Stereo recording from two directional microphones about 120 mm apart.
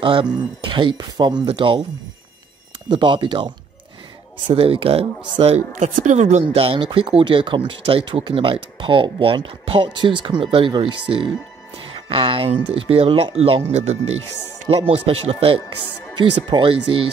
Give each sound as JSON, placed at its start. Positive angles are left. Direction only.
{"t": 0.0, "sound": "speech", "side_deg": -45}
{"t": 2.9, "sound": "speech", "side_deg": -40}
{"t": 5.8, "sound": "speech", "side_deg": -85}
{"t": 6.4, "sound": "speech", "side_deg": -50}
{"t": 14.7, "sound": "speech", "side_deg": -50}